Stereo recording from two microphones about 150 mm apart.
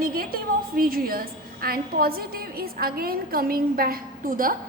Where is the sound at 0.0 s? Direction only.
75° right (ahead or behind).